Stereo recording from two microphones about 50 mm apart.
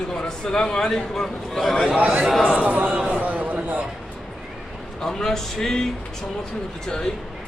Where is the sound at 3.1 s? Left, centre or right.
Right.